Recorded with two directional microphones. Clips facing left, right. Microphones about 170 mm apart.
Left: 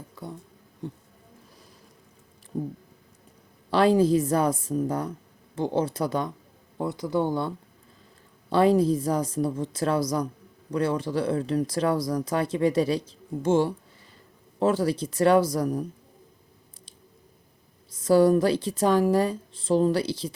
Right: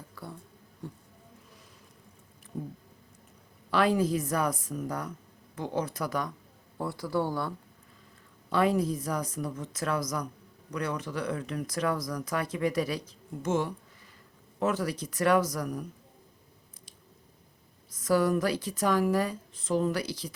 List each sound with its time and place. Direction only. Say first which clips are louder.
0.2 s a sound: left 5 dB; 20° left (ahead or behind)
0.8 s speech: left 6 dB; 20° left (ahead or behind)
3.7 s speech: left 6 dB; 30° left (ahead or behind)
17.9 s speech: left 7 dB; 30° left (ahead or behind)